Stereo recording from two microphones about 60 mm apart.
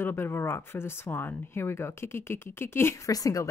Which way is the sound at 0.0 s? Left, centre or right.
Left.